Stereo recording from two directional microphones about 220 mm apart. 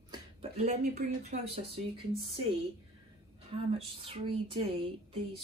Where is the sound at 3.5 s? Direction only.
25° right (ahead or behind).